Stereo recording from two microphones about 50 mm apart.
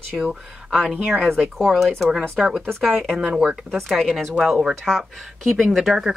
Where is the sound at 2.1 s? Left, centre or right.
Centre.